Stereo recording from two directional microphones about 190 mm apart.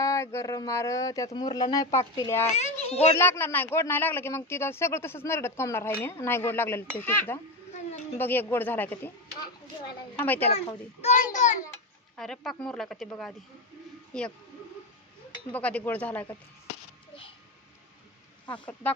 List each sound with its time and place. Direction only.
0.0 s speech: 15° left (ahead or behind)
2.6 s a woman's voice: 35° left (ahead or behind)
3.2 s speech: 10° left (ahead or behind)
7.7 s a sound: 35° left (ahead or behind)
8.2 s speech: 10° left (ahead or behind)
10.2 s speech: 10° left (ahead or behind)
10.5 s a child's voice: 35° left (ahead or behind)
11.3 s a sound: 40° left (ahead or behind)
11.6 s a child's voice: 5° left (ahead or behind)
15.5 s speech: 10° left (ahead or behind)
18.4 s speech: 25° left (ahead or behind)